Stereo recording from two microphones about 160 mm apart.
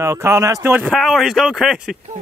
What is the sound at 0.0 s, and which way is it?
Speech, 20° right (ahead or behind).